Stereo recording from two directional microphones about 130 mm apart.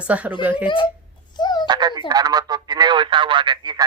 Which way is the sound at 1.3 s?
35° left (ahead or behind).